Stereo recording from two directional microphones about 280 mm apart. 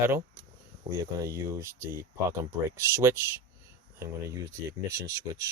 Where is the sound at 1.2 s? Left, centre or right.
Centre.